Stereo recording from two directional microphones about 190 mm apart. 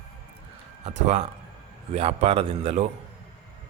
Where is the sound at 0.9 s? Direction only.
35° right (ahead or behind).